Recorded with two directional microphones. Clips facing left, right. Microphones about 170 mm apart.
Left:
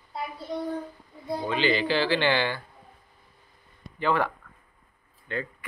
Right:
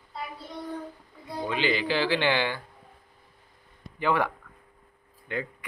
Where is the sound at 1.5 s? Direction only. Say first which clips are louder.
Left 2 dB; 10° right (ahead or behind).